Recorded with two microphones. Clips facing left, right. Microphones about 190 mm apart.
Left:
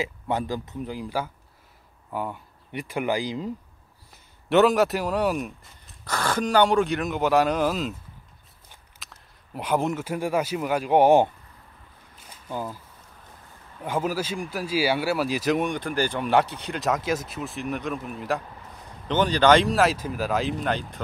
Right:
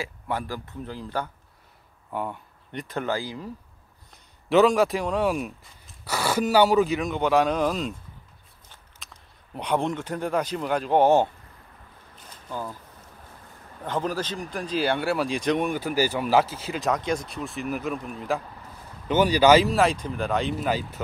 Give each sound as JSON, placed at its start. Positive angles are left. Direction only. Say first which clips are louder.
{"t": 0.0, "sound": "a man's voice", "louder": "left 3 dB", "side_deg": 20}
{"t": 4.1, "sound": "speech", "louder": "even", "side_deg": 0}
{"t": 9.0, "sound": "speech", "louder": "left 1 dB", "side_deg": 5}
{"t": 12.4, "sound": "speech", "louder": "left 2 dB", "side_deg": 10}
{"t": 13.8, "sound": "speech", "louder": "left 1 dB", "side_deg": 10}
{"t": 19.0, "sound": "speech", "louder": "right 1 dB", "side_deg": -10}